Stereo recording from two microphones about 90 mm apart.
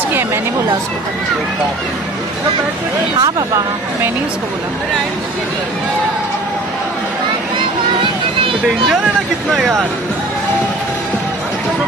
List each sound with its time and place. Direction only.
3.2 s speech: 50° right (ahead or behind)
7.5 s a sound: 75° right (ahead or behind)
9.6 s speech: centre (ahead or behind)